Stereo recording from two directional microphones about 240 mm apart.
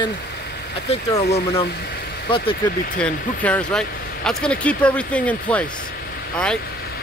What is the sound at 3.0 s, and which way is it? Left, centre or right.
Speech, centre.